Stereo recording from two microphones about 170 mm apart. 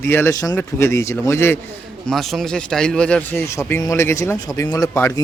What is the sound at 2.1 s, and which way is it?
Speech, centre (ahead or behind).